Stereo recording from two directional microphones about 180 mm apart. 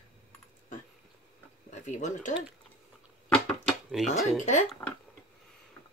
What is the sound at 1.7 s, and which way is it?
Speech, 40° left (ahead or behind).